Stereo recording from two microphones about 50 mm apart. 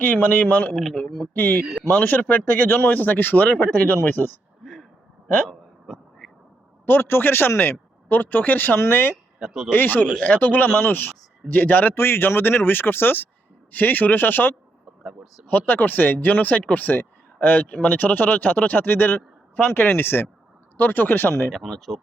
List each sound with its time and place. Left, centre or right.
0.0 s speech: left
0.9 s speech: centre
1.4 s speech: left
4.6 s a sound: centre
5.9 s a sound: centre
6.8 s a man's voice: left
8.0 s a man's voice: left
21.2 s speech: left
21.5 s speech: centre